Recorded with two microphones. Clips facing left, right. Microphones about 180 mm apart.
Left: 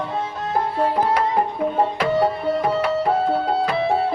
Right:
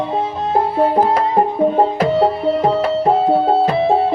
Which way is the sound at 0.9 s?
40° right (ahead or behind).